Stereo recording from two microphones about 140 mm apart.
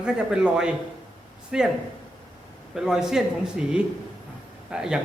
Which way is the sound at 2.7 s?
5° right (ahead or behind).